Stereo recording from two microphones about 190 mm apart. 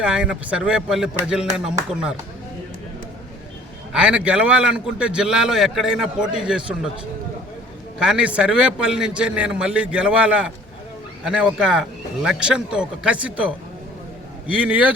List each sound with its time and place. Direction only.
0.0 s a man's voice: 5° right (ahead or behind)
3.9 s a man's voice: 5° right (ahead or behind)
7.9 s a man's voice: 5° right (ahead or behind)